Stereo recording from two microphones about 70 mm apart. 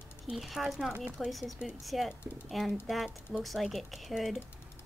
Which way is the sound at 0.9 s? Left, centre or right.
Centre.